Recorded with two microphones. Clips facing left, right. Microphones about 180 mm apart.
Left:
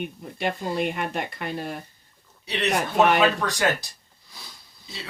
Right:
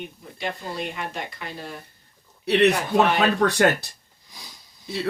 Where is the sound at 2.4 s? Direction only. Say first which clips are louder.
Right 6 dB; 60° right (ahead or behind).